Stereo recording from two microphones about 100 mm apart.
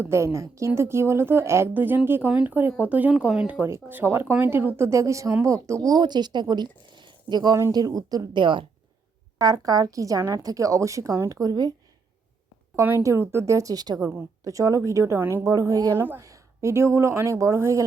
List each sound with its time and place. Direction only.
0.0 s a woman's voice: 25° right (ahead or behind)
3.6 s a woman's voice: 20° right (ahead or behind); by 8.6 s 55° right (ahead or behind)
9.4 s a woman's voice: 40° right (ahead or behind)
12.7 s a woman's voice: 30° right (ahead or behind)
15.2 s a woman's voice: 20° right (ahead or behind)
15.4 s a woman's voice: 35° right (ahead or behind)
16.0 s a woman's voice: 25° right (ahead or behind)